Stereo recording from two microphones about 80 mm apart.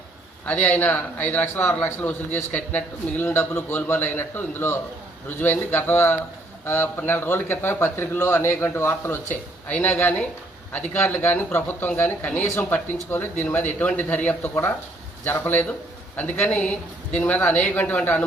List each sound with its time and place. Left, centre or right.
0.4 s speech: centre